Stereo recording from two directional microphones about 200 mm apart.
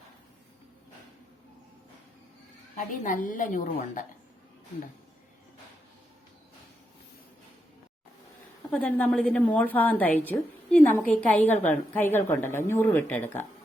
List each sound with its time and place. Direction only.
2.7 s a woman's voice: 40° left (ahead or behind)
8.7 s a woman's voice: 5° left (ahead or behind)